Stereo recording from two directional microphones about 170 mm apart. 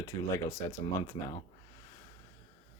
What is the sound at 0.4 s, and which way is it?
Speech, 15° left (ahead or behind).